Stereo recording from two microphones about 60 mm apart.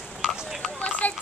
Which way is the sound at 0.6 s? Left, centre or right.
Left.